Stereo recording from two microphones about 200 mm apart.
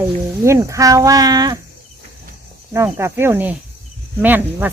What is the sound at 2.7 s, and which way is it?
Speech, 15° right (ahead or behind).